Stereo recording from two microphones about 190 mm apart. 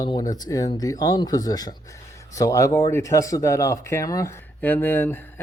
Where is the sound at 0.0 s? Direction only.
20° left (ahead or behind).